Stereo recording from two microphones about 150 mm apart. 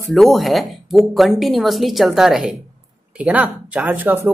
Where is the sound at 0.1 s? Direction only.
Centre (ahead or behind).